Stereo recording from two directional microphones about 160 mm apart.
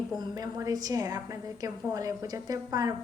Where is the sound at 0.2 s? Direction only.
25° right (ahead or behind).